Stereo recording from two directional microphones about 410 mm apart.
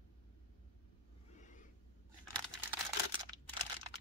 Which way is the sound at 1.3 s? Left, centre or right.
Centre.